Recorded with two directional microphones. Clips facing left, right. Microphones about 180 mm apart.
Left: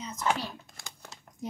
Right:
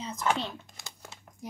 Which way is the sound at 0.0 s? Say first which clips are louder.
Right 1 dB; 30° right (ahead or behind).